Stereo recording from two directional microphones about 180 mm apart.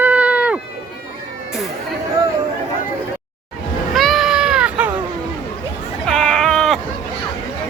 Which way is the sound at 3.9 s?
Centre (ahead or behind).